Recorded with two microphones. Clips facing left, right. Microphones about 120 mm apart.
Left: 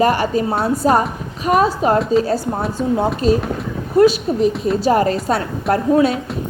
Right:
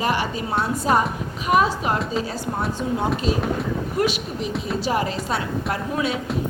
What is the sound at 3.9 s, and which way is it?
A woman's voice, 35° left (ahead or behind).